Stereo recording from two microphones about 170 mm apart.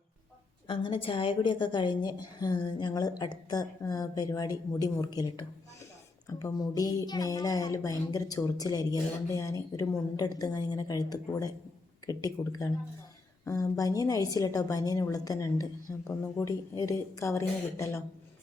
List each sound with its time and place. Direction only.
0.7 s a woman's voice: 30° left (ahead or behind)